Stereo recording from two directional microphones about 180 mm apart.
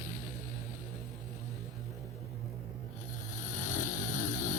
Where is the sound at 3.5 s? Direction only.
45° left (ahead or behind).